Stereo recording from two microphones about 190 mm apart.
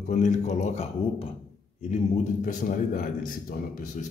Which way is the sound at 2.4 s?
45° left (ahead or behind).